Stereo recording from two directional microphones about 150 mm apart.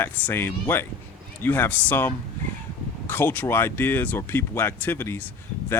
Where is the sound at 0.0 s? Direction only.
15° left (ahead or behind).